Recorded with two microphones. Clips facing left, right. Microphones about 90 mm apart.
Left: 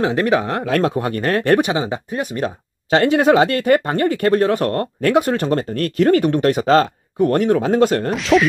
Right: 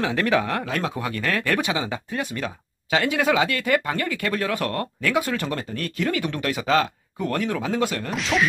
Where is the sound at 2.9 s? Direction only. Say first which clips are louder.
Left 8 dB; 50° left (ahead or behind); by 4.8 s 35° left (ahead or behind).